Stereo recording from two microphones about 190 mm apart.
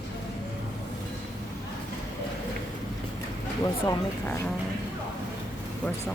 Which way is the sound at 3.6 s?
20° left (ahead or behind).